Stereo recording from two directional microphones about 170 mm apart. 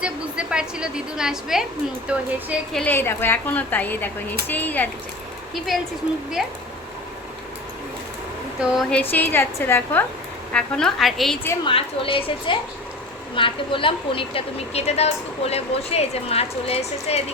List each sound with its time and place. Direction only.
0.0 s a woman's voice: 5° right (ahead or behind)
2.8 s speech: 10° left (ahead or behind)
5.7 s a woman's voice: centre (ahead or behind)
8.8 s a woman's voice: 10° left (ahead or behind)
11.6 s a woman's voice: 30° left (ahead or behind)